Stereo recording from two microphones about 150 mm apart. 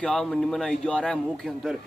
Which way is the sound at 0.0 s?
5° left (ahead or behind).